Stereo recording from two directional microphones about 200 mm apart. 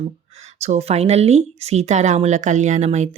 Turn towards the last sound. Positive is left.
turn(degrees=-35)  # may be behind; listen again after turning